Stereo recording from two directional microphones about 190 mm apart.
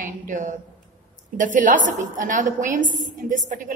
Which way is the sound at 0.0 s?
45° right (ahead or behind).